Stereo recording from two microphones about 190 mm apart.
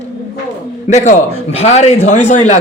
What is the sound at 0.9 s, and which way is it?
A man's voice, 40° left (ahead or behind).